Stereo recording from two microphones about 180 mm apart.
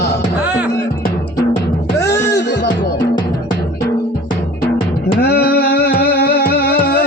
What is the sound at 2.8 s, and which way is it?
Music, 25° left (ahead or behind).